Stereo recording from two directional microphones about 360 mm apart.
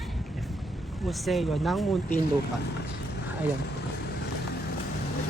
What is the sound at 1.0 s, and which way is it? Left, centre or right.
Speech, centre.